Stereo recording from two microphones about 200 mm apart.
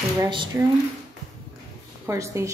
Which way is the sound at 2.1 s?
15° right (ahead or behind).